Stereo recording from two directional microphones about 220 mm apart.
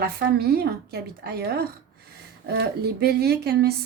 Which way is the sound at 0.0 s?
45° right (ahead or behind).